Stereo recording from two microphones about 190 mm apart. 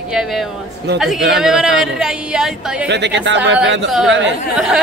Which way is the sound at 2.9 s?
65° right (ahead or behind).